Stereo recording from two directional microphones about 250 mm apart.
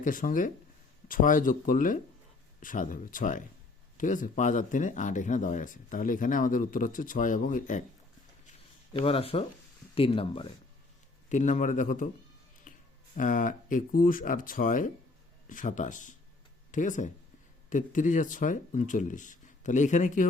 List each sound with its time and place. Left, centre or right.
0.0 s speech: left
8.9 s speech: left
12.7 s a sound: left
13.1 s speech: left